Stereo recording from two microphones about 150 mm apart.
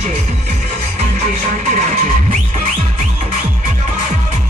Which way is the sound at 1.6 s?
55° right (ahead or behind).